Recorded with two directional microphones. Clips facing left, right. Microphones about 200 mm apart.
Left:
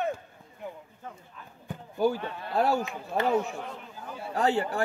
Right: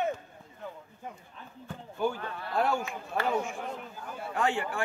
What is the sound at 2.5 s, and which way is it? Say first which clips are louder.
A man's voice: left 3 dB; 35° left (ahead or behind).